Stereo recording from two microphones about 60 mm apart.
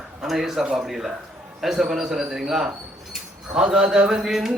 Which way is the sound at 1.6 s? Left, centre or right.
Centre.